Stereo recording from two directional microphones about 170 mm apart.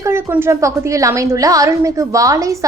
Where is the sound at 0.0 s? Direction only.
15° right (ahead or behind).